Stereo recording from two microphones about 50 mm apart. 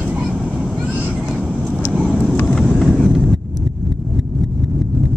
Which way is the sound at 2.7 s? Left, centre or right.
Centre.